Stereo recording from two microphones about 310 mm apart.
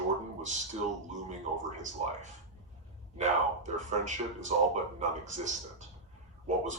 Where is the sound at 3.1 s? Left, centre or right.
Right.